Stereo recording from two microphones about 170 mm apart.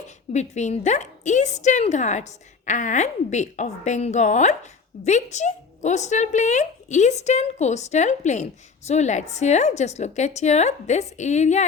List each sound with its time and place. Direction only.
0.3 s speech: 40° left (ahead or behind)